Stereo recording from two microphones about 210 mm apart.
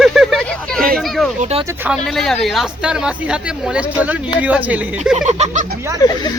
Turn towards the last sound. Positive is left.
turn(degrees=20)  # may be behind; listen again after turning